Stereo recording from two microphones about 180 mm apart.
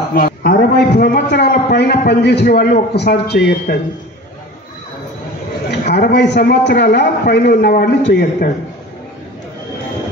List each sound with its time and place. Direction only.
0.1 s a man's voice: 50° left (ahead or behind)
5.7 s a man's voice: 65° left (ahead or behind)